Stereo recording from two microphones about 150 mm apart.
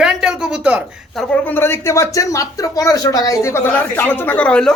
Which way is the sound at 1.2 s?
5° left (ahead or behind).